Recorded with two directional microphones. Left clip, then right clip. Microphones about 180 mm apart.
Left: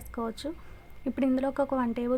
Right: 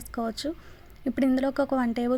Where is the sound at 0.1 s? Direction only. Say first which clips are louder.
Right 4 dB; 15° right (ahead or behind).